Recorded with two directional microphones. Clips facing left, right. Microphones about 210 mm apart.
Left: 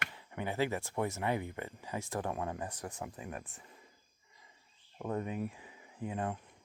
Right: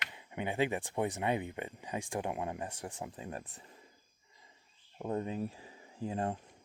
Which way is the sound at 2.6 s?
30° right (ahead or behind).